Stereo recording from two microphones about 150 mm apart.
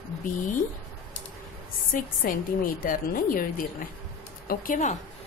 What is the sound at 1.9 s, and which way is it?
A woman's voice, 65° left (ahead or behind).